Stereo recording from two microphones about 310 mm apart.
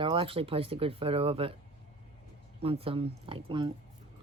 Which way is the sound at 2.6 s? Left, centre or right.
Centre.